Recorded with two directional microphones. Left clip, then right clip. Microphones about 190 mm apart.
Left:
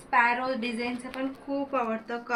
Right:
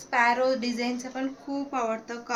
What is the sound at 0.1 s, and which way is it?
Speech, 70° right (ahead or behind).